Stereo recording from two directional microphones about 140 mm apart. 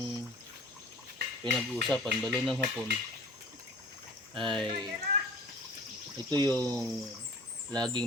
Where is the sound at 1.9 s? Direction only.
5° left (ahead or behind).